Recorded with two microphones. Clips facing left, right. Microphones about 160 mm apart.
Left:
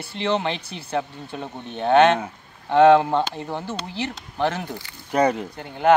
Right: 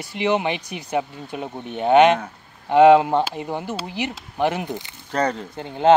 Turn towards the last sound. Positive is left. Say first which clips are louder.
# right 2 dB
turn(degrees=-25)  # may be behind; listen again after turning